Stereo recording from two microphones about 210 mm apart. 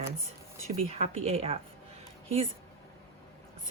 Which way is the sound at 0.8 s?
30° right (ahead or behind).